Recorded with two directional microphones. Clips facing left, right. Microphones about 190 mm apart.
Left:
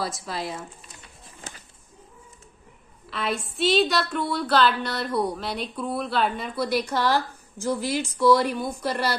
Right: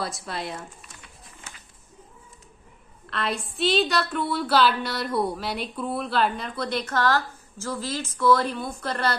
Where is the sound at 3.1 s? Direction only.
Centre (ahead or behind).